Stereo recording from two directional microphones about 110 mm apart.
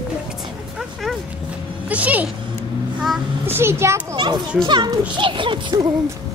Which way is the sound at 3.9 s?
35° right (ahead or behind).